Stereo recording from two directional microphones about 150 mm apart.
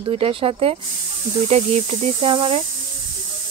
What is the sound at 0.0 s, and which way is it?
Speech, 40° right (ahead or behind).